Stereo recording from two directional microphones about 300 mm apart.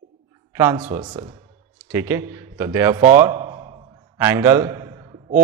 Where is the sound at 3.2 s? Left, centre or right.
Centre.